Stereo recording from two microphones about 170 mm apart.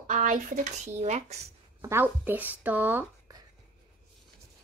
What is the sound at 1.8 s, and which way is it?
Speech, 15° right (ahead or behind).